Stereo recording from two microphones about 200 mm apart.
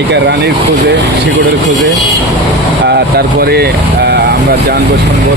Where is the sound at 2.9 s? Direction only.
55° right (ahead or behind).